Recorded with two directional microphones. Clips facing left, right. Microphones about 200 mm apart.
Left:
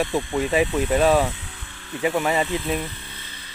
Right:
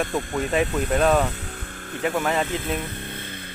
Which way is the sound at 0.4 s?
Centre (ahead or behind).